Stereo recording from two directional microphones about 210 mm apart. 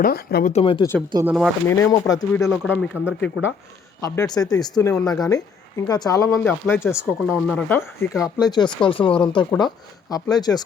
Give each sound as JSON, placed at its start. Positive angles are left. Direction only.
{"t": 0.0, "sound": "speech", "side_deg": 45}
{"t": 0.5, "sound": "speech", "side_deg": 25}
{"t": 1.1, "sound": "speech", "side_deg": -10}
{"t": 1.6, "sound": "speech", "side_deg": 15}
{"t": 2.5, "sound": "speech", "side_deg": 5}
{"t": 8.2, "sound": "speech", "side_deg": 20}